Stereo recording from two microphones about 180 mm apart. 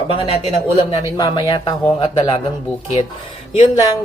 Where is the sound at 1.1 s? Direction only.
20° left (ahead or behind).